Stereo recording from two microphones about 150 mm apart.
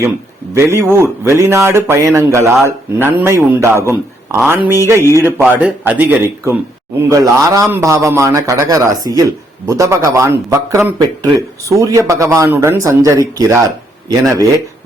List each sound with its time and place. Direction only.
0.5 s a man's voice: 15° right (ahead or behind)